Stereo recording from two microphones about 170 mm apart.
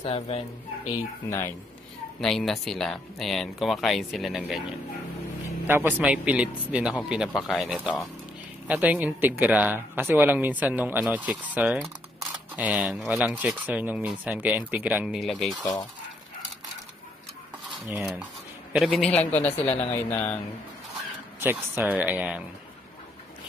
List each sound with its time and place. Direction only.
0.0 s speech: 35° left (ahead or behind)
0.8 s speech: 15° left (ahead or behind)
2.1 s speech: 5° left (ahead or behind)
5.7 s speech: 10° right (ahead or behind)
18.7 s speech: 5° right (ahead or behind)
21.4 s speech: 10° right (ahead or behind)